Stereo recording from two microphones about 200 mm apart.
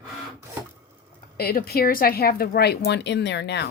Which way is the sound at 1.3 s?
50° left (ahead or behind).